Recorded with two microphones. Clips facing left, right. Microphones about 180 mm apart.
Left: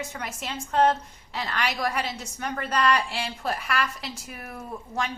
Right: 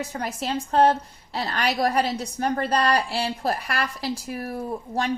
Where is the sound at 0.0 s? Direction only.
35° right (ahead or behind).